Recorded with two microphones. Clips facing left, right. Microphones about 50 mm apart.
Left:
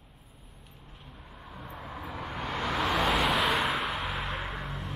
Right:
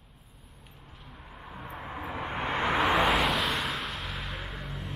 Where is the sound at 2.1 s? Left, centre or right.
Right.